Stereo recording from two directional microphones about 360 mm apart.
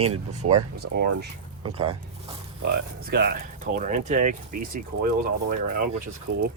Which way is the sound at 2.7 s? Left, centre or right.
Right.